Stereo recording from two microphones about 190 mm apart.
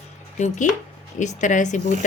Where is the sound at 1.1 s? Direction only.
40° left (ahead or behind).